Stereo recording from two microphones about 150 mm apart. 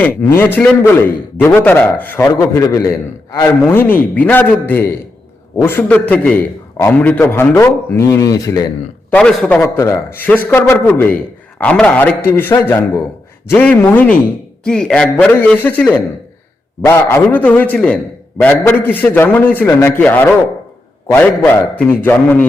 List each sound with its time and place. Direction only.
0.0 s a man's voice: 15° left (ahead or behind)
9.1 s a man's voice: 5° left (ahead or behind)
9.6 s a man's voice: 20° left (ahead or behind)